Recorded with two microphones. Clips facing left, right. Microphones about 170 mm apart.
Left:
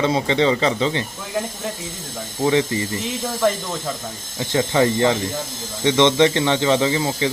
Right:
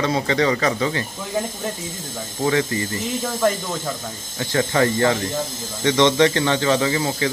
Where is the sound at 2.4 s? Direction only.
20° left (ahead or behind).